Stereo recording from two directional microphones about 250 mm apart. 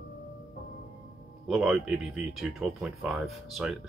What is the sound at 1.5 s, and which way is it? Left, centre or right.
Speech, centre.